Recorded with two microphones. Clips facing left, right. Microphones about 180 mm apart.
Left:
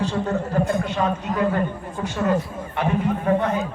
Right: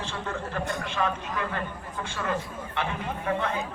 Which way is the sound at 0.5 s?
30° left (ahead or behind).